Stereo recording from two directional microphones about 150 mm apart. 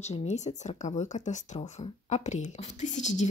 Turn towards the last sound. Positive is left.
turn(degrees=55)  # may be behind; listen again after turning